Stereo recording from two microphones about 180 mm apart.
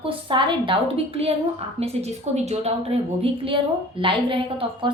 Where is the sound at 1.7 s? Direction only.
35° right (ahead or behind).